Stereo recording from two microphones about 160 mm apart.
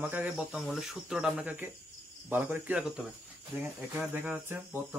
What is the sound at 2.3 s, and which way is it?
Cricket, 10° right (ahead or behind).